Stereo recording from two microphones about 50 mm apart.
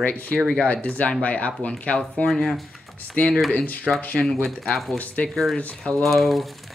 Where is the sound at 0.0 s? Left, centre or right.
Left.